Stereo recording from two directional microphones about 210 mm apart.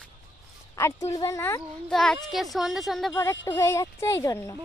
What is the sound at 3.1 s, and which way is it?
Speech, 10° left (ahead or behind).